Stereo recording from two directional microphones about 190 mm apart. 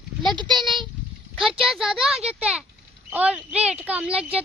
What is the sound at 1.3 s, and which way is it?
A child's voice, centre (ahead or behind).